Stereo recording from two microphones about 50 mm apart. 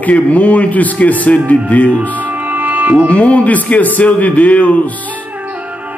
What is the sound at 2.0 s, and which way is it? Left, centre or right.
Music, right.